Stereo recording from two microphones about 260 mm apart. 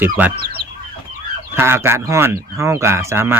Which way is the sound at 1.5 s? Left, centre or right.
Centre.